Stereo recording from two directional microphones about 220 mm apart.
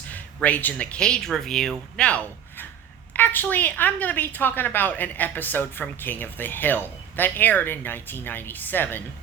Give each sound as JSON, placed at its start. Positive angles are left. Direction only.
{"t": 0.1, "sound": "a woman's voice", "side_deg": 5}